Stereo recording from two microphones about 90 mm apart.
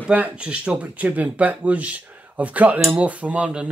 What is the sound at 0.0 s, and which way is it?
Speech, 15° right (ahead or behind).